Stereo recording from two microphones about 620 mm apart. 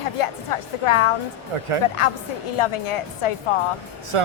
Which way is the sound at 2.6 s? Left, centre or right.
Left.